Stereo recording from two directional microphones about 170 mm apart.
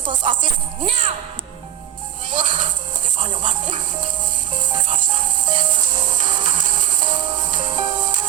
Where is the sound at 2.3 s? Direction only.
50° right (ahead or behind).